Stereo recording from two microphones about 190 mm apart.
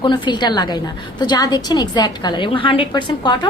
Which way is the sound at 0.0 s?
25° left (ahead or behind).